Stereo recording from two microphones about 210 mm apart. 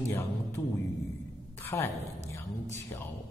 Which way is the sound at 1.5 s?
10° left (ahead or behind).